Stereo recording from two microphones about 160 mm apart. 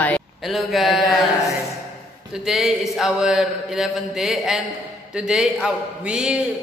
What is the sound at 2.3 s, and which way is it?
Mantra, centre (ahead or behind).